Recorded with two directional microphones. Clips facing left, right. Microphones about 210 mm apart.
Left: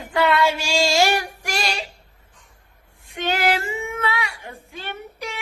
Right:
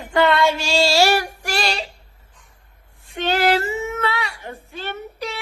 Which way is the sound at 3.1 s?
10° left (ahead or behind).